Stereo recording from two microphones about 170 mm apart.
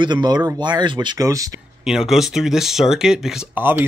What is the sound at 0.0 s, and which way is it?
Speech, 25° right (ahead or behind).